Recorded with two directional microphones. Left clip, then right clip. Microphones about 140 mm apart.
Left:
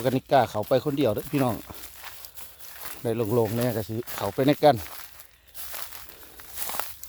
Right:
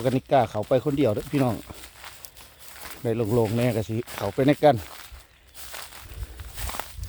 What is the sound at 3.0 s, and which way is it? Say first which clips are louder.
Speech: right 1 dB; 5° left (ahead or behind).